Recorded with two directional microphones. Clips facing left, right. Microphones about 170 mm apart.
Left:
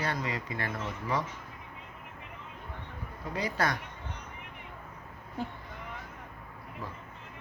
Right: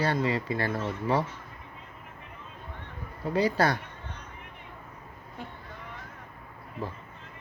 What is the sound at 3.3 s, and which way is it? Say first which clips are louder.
Speech: right 6 dB; 30° right (ahead or behind).